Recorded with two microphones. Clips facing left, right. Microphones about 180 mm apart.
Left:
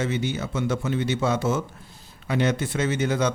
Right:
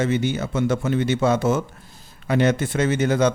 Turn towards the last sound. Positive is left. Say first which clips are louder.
# right 4 dB
turn(degrees=-50)  # may be behind; listen again after turning